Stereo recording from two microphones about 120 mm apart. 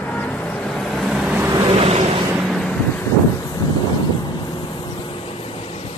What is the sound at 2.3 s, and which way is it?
Vehicle, centre (ahead or behind).